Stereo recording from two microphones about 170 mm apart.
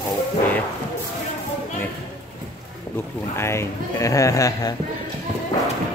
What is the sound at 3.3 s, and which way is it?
Speech, 15° left (ahead or behind).